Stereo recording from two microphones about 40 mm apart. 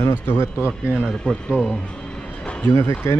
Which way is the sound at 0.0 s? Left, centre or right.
Left.